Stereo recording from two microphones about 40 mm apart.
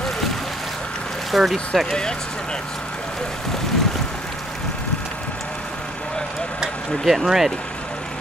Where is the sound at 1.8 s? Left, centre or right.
Centre.